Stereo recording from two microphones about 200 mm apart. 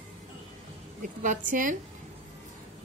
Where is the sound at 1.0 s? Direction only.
40° right (ahead or behind).